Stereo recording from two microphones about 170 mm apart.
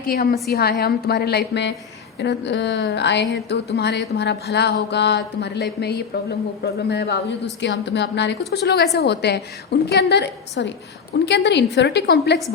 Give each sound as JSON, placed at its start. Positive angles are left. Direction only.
{"t": 0.1, "sound": "a woman's voice", "side_deg": 65}
{"t": 7.6, "sound": "a woman's voice", "side_deg": 90}